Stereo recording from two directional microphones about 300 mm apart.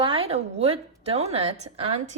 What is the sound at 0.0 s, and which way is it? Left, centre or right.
A woman's voice, centre.